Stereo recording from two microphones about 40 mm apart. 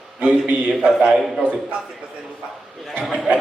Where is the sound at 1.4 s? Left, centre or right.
Right.